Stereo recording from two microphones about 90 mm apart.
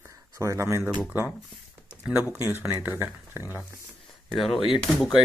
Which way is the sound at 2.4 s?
25° right (ahead or behind).